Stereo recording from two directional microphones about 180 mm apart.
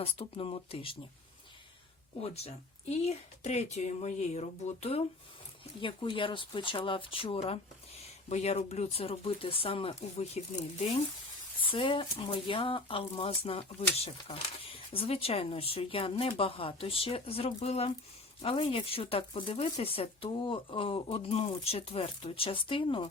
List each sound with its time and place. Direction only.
0.0 s speech: 30° left (ahead or behind)
2.2 s speech: 35° left (ahead or behind)
11.6 s speech: 30° left (ahead or behind)